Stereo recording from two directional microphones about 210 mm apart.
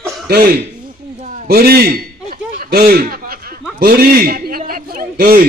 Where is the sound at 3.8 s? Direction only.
45° right (ahead or behind).